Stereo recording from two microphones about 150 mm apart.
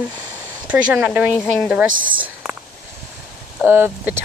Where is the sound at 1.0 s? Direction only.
10° right (ahead or behind).